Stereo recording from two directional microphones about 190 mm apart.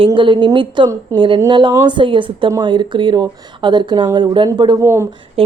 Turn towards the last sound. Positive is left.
turn(degrees=-30)  # may be behind; listen again after turning